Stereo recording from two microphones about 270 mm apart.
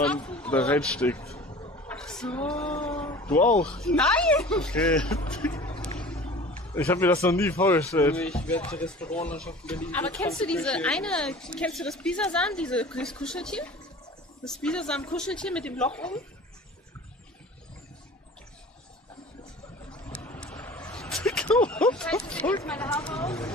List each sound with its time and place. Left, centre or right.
0.0 s speech: centre
1.3 s vehicle: centre
1.9 s speech: centre
5.5 s speech: centre
5.8 s vehicle: centre
6.2 s a sound: left
6.7 s a man's voice: centre
19.9 s a sound: centre
22.3 s speech: centre